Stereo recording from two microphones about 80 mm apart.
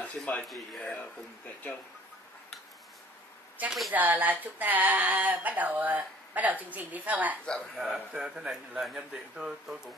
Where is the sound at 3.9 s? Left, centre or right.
Right.